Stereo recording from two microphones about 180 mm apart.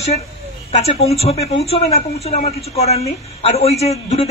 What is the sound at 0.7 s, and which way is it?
A man's voice, 35° left (ahead or behind).